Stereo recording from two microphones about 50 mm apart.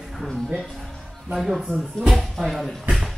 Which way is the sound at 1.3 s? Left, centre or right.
Centre.